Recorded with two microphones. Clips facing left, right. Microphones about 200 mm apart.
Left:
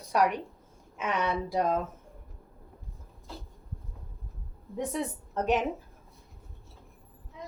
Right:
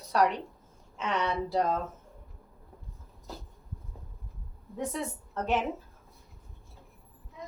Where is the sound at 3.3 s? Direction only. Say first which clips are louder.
Right 1 dB; 40° right (ahead or behind).